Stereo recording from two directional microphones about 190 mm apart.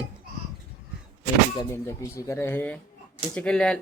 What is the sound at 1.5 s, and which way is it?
Speech, 15° left (ahead or behind).